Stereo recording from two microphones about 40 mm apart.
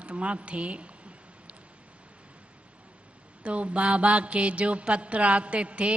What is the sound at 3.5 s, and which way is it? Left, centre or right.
A man's voice, right.